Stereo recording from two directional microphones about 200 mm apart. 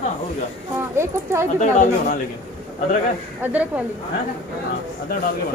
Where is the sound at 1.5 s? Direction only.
40° left (ahead or behind).